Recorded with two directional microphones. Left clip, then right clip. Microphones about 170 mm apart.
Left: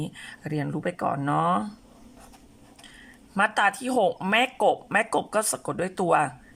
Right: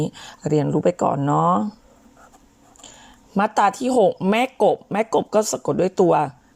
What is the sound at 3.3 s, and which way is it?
Speech, 20° right (ahead or behind).